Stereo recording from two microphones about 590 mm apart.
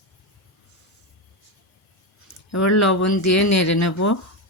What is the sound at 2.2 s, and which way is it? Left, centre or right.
Speech, left.